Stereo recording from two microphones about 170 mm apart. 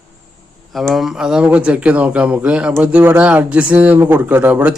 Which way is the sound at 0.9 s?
Centre (ahead or behind).